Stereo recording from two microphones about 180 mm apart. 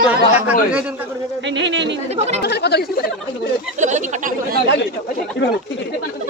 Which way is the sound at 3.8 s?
40° right (ahead or behind).